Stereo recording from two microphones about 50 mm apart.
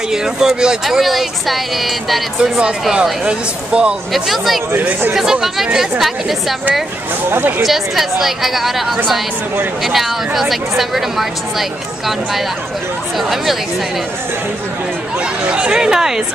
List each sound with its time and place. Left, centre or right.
0.1 s speech: centre
0.8 s speech: centre
2.9 s speech: centre
4.1 s speech: centre
7.2 s speech: right
7.6 s speech: centre
9.8 s speech: centre
15.5 s speech: centre